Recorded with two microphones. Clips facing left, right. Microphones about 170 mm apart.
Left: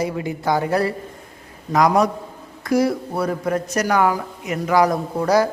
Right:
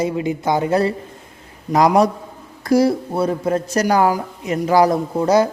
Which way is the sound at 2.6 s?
35° right (ahead or behind).